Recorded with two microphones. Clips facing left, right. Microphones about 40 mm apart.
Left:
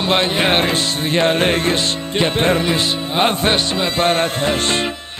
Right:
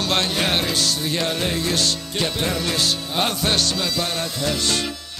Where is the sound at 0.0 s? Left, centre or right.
Left.